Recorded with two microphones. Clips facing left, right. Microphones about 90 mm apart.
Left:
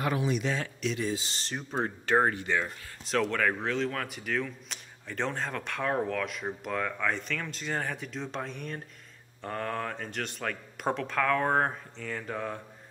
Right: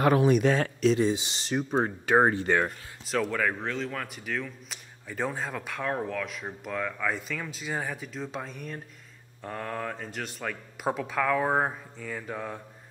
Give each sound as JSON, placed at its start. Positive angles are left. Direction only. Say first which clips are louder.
{"t": 0.0, "sound": "speech", "louder": "right 8 dB", "side_deg": -55}
{"t": 1.0, "sound": "speech", "louder": "right 5 dB", "side_deg": -20}
{"t": 2.4, "sound": "speech", "louder": "right 5 dB", "side_deg": -50}
{"t": 3.1, "sound": "speech", "louder": "even", "side_deg": -5}